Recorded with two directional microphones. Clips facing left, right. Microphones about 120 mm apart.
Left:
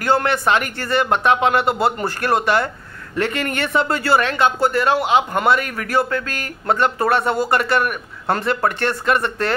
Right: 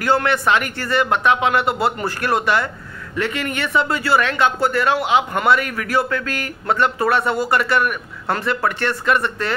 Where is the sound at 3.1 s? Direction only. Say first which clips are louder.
Left 2 dB; 45° left (ahead or behind).